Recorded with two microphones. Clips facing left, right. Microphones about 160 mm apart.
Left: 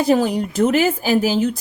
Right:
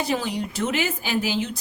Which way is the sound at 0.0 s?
45° left (ahead or behind).